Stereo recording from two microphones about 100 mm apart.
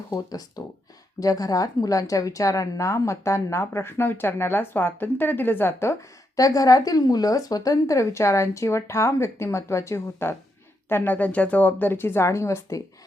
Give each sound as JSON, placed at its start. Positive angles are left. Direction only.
{"t": 0.1, "sound": "a woman's voice", "side_deg": 40}